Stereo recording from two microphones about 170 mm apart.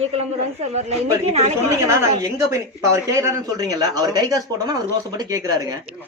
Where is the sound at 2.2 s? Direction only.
20° right (ahead or behind).